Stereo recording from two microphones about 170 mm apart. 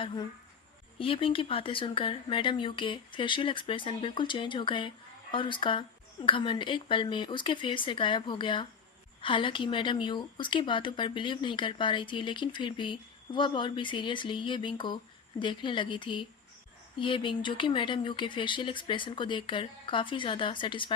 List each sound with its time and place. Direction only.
0.0 s a woman's voice: 30° left (ahead or behind)